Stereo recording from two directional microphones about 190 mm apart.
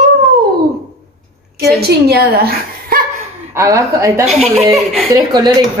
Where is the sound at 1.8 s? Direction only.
55° right (ahead or behind).